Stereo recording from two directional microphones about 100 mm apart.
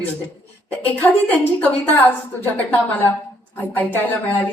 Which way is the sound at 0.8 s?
15° left (ahead or behind).